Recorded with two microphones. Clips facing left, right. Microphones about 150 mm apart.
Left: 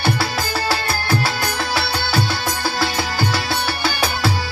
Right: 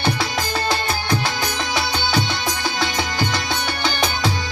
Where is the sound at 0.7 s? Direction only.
5° left (ahead or behind).